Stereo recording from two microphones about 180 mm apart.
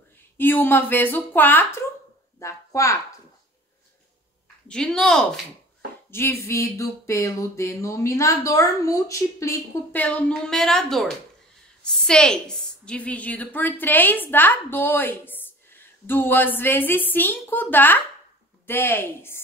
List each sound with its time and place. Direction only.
0.4 s a woman's voice: 10° left (ahead or behind)
4.6 s speech: 5° left (ahead or behind)
6.0 s a woman's voice: 15° left (ahead or behind)